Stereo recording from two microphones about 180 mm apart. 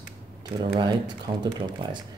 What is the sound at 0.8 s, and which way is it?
Speech, 25° right (ahead or behind).